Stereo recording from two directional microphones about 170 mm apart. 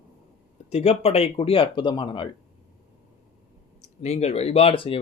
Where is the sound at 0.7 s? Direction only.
40° left (ahead or behind).